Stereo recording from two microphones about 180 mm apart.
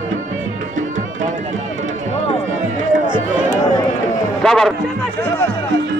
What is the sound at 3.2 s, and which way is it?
Music, 45° right (ahead or behind).